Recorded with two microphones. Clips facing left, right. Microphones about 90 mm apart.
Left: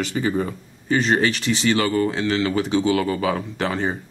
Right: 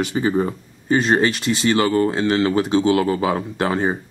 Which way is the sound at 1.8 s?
40° right (ahead or behind).